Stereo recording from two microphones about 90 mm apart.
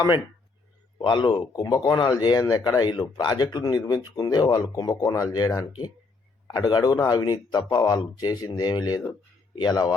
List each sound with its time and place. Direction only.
1.0 s a man's voice: 55° left (ahead or behind); by 5.9 s 40° left (ahead or behind)
6.5 s a man's voice: 50° left (ahead or behind)